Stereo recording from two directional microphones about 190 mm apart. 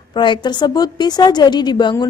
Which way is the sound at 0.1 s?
25° left (ahead or behind).